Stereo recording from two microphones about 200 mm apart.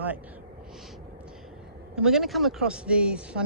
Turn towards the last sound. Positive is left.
turn(degrees=-5)  # may be behind; listen again after turning